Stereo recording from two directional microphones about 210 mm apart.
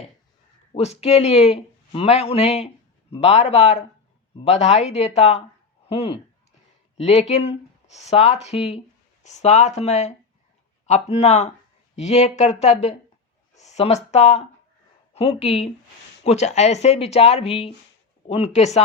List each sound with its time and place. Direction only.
0.7 s speech: 30° left (ahead or behind)